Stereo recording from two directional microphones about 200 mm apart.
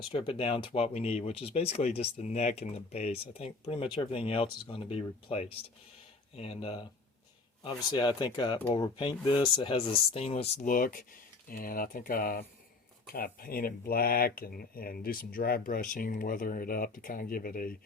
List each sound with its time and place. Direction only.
0.1 s speech: 25° left (ahead or behind); by 17.7 s 45° left (ahead or behind)